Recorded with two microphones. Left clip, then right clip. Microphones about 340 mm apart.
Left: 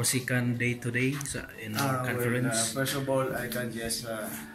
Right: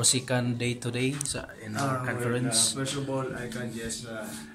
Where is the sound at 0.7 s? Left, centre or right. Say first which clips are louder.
Left 1 dB; right.